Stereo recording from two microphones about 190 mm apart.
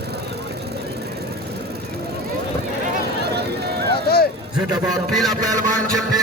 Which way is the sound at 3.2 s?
60° right (ahead or behind).